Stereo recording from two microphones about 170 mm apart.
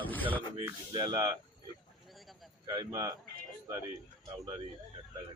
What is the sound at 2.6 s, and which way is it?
Speech, 20° right (ahead or behind).